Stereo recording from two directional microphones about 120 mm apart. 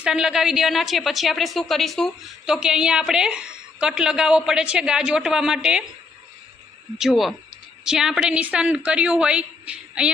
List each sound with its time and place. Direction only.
0.0 s a woman's voice: 5° right (ahead or behind)
7.0 s a woman's voice: centre (ahead or behind)